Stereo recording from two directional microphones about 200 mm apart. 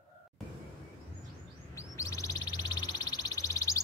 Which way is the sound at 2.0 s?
15° left (ahead or behind).